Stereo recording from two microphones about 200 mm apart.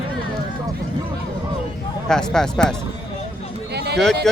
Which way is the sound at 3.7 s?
55° right (ahead or behind).